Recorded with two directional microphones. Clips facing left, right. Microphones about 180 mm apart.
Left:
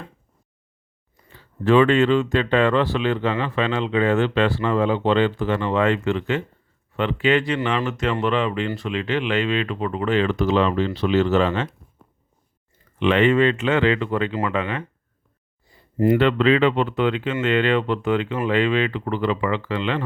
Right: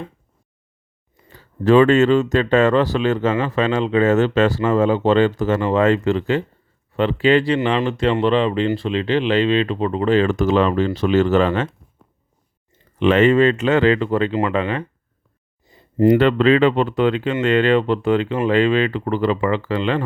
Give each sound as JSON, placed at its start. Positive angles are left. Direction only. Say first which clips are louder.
{"t": 1.3, "sound": "speech", "louder": "right 3 dB", "side_deg": -40}
{"t": 13.0, "sound": "speech", "louder": "right 3 dB", "side_deg": -40}
{"t": 15.6, "sound": "a sound", "louder": "right 4 dB", "side_deg": -20}
{"t": 16.0, "sound": "speech", "louder": "right 3 dB", "side_deg": -40}